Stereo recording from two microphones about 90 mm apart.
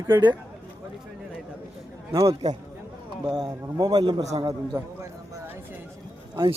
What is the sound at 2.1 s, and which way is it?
A man's voice, 35° right (ahead or behind).